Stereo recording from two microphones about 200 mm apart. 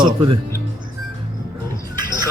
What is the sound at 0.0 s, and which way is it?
Speech, 25° right (ahead or behind).